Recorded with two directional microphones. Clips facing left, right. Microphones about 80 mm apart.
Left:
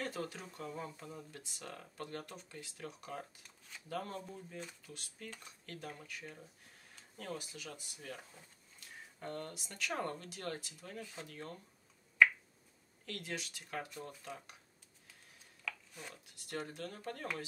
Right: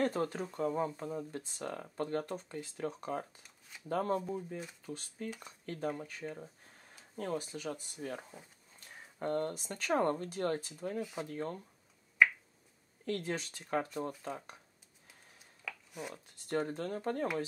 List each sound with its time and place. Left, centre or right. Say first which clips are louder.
0.0 s speech: right 9 dB; right
13.0 s speech: right 8 dB; right
15.6 s chopping: right 4 dB; centre
16.3 s speech: right 9 dB; right